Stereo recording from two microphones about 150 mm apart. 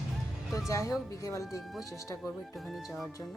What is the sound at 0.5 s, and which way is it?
Speech, 20° left (ahead or behind).